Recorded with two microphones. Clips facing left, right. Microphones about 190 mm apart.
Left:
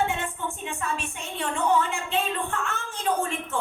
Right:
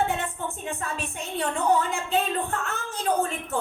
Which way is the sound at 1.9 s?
40° right (ahead or behind).